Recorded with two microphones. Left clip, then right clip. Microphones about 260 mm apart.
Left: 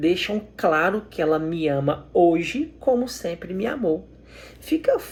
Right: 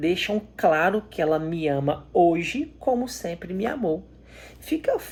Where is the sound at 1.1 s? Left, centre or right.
Right.